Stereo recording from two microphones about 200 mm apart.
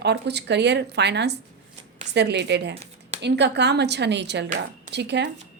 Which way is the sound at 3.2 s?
60° right (ahead or behind).